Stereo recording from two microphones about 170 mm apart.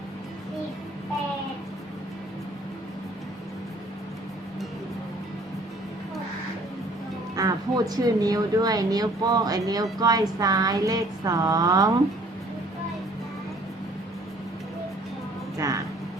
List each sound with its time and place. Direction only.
7.3 s speech: 20° right (ahead or behind)
15.5 s music: 20° right (ahead or behind)